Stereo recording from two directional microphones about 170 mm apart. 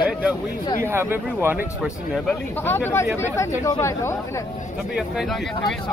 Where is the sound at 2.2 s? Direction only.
10° left (ahead or behind).